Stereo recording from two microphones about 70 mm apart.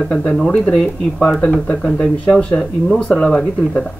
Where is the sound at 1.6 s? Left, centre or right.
Centre.